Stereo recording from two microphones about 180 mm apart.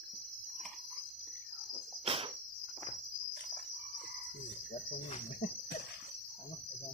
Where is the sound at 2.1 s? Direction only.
30° right (ahead or behind).